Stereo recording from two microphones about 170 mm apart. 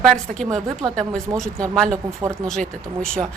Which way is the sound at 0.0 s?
5° left (ahead or behind).